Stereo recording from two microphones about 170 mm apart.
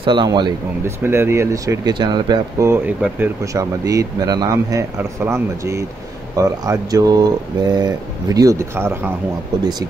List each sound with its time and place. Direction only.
0.0 s speech: 25° right (ahead or behind)
0.8 s speech: 15° right (ahead or behind)
2.7 s speech: 15° right (ahead or behind)